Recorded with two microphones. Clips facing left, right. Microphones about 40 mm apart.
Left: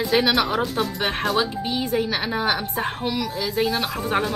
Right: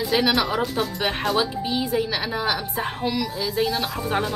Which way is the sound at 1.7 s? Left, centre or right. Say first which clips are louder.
Left 1 dB; left.